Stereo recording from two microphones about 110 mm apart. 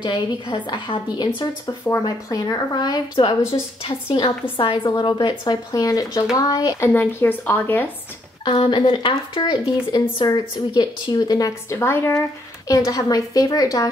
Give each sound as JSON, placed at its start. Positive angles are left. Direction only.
{"t": 0.0, "sound": "a woman's voice", "side_deg": 45}
{"t": 1.9, "sound": "a woman's voice", "side_deg": 30}
{"t": 4.2, "sound": "a woman's voice", "side_deg": 45}
{"t": 6.9, "sound": "a woman's voice", "side_deg": 20}
{"t": 8.5, "sound": "a woman's voice", "side_deg": 45}